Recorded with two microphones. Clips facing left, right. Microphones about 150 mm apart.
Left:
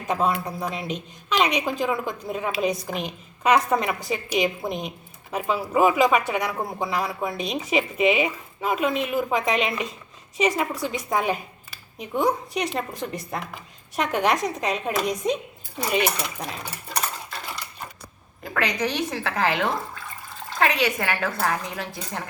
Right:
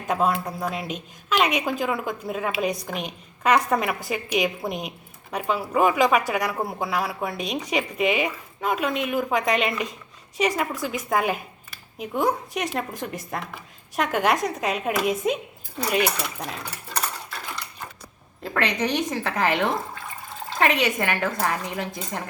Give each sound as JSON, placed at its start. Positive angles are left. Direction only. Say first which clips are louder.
{"t": 0.0, "sound": "speech", "louder": "right 1 dB", "side_deg": 0}
{"t": 18.8, "sound": "a woman's voice", "louder": "right 1 dB", "side_deg": -20}
{"t": 20.7, "sound": "a woman's voice", "louder": "right 2 dB", "side_deg": -20}